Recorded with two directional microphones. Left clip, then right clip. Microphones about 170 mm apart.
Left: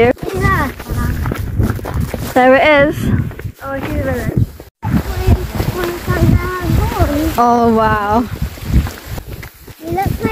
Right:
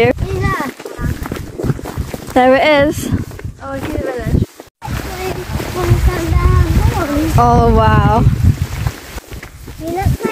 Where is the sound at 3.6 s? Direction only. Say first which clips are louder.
Left 1 dB; 45° right (ahead or behind).